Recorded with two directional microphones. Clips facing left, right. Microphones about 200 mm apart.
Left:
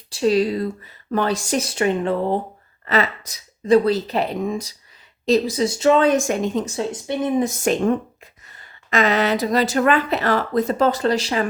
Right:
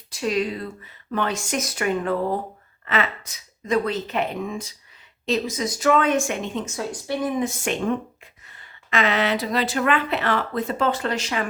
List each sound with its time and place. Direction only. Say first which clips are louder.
0.1 s speech: left 6 dB; 30° left (ahead or behind)
2.8 s speech: left 4 dB; 35° left (ahead or behind)
6.7 s speech: left 3 dB; 20° left (ahead or behind)
7.4 s speech: left 5 dB; 40° left (ahead or behind)